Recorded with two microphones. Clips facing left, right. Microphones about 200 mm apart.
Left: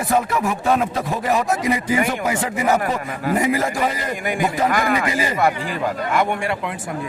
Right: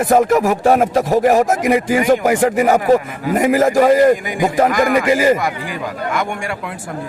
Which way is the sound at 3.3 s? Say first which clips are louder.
Right 6 dB; 90° right.